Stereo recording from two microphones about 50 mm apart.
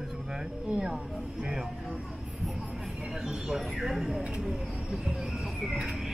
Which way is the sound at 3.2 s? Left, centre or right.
Centre.